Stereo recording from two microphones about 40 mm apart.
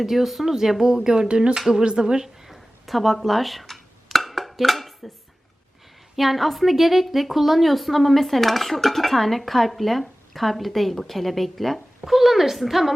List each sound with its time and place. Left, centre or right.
0.0 s speech: centre; by 2.2 s right
2.2 s a sound: centre
6.1 s a woman's voice: centre